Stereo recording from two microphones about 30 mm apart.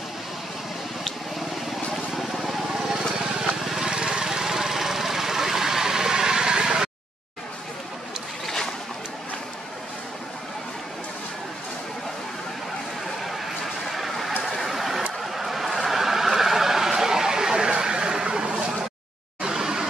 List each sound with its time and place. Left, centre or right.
2.1 s vehicle: centre
2.9 s vehicle: centre
4.3 s vehicle: centre
13.9 s a sound: centre
14.5 s vehicle: centre
15.3 s a sound: centre